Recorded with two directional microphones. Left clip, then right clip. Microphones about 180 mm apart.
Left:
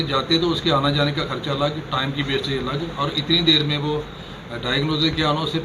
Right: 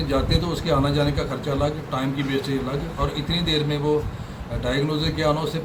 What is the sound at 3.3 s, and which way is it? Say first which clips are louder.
A man's voice: left 8 dB; 5° right (ahead or behind).